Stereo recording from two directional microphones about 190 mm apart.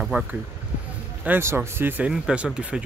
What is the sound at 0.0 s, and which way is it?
Speech, 5° right (ahead or behind).